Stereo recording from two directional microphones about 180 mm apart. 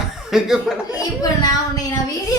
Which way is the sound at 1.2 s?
20° left (ahead or behind).